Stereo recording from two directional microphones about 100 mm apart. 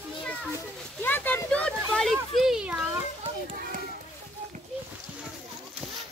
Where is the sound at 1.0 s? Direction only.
20° left (ahead or behind); by 2.8 s 10° right (ahead or behind).